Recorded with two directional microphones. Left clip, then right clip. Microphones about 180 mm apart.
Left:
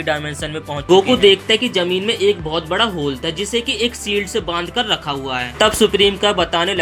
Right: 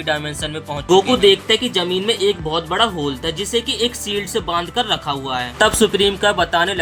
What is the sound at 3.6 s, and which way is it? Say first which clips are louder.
Speech: left 1 dB; 40° right (ahead or behind).